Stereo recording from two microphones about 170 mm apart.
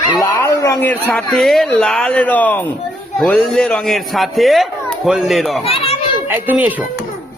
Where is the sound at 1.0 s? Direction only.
5° left (ahead or behind).